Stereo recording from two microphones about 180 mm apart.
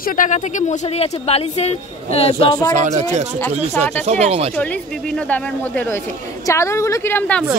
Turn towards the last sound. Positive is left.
turn(degrees=10)  # may be behind; listen again after turning